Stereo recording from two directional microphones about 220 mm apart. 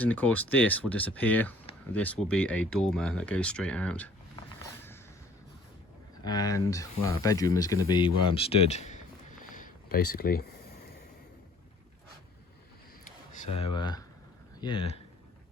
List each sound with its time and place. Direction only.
0.0 s speech: 5° left (ahead or behind)
6.2 s speech: 20° left (ahead or behind)
9.4 s a sound: 40° left (ahead or behind)
13.3 s speech: 35° left (ahead or behind)
13.7 s speech: 20° left (ahead or behind)